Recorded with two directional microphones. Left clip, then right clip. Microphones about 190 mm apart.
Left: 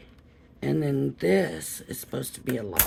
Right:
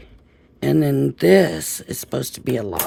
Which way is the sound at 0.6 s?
50° right (ahead or behind).